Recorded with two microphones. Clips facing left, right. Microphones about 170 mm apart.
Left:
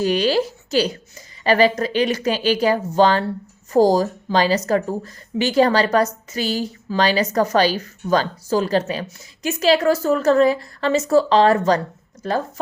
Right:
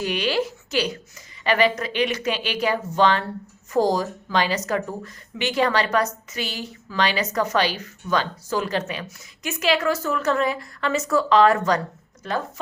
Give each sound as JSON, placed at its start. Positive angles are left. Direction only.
{"t": 0.0, "sound": "a woman's voice", "side_deg": 35}